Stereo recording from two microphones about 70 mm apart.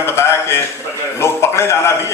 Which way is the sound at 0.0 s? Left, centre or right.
Left.